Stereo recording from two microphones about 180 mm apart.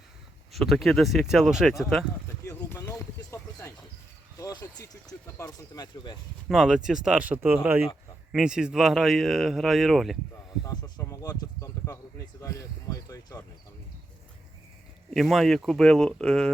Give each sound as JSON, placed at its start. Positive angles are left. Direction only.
{"t": 0.5, "sound": "speech", "side_deg": 0}
{"t": 2.2, "sound": "a sound", "side_deg": 15}
{"t": 5.4, "sound": "speech", "side_deg": 20}
{"t": 6.5, "sound": "speech", "side_deg": -5}
{"t": 10.6, "sound": "a sound", "side_deg": 20}
{"t": 15.1, "sound": "speech", "side_deg": 0}